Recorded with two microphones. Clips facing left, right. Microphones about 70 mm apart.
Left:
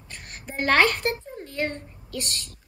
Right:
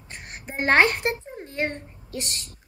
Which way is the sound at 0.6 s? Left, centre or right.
Right.